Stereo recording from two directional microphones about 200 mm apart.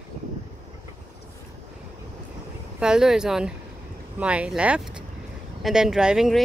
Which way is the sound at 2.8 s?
5° right (ahead or behind).